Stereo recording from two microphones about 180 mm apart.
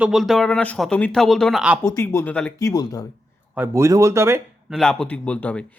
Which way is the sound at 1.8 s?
15° left (ahead or behind).